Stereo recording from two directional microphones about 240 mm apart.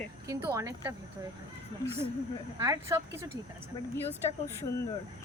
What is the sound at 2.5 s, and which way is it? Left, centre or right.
Speech, centre.